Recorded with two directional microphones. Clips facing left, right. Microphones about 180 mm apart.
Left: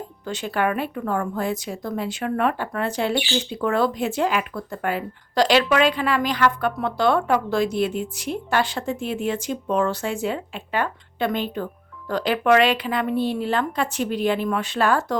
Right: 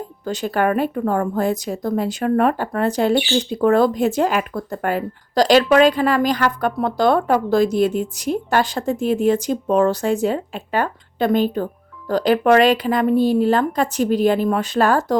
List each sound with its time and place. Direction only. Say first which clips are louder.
0.3 s speech: right 4 dB; 40° right (ahead or behind)